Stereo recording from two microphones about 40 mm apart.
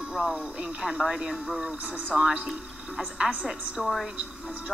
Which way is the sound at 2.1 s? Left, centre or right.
Right.